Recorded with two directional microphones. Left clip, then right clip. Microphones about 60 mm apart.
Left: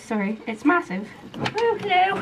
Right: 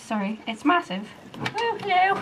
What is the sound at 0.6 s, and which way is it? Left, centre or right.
Speech, right.